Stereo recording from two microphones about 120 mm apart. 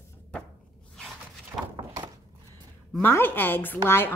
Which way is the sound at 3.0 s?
15° left (ahead or behind).